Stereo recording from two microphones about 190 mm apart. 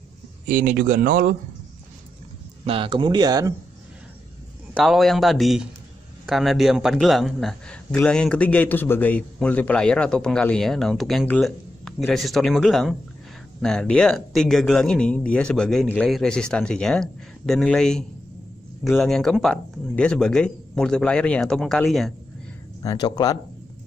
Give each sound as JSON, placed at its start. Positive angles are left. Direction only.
{"t": 0.5, "sound": "speech", "side_deg": -45}
{"t": 2.6, "sound": "speech", "side_deg": -30}
{"t": 4.8, "sound": "a man's voice", "side_deg": 0}
{"t": 22.8, "sound": "speech", "side_deg": 20}